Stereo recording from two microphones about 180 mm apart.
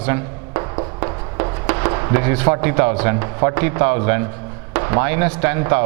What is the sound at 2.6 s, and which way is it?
Speech, 15° right (ahead or behind).